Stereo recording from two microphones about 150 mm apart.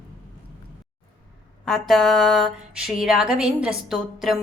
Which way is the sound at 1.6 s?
Centre (ahead or behind).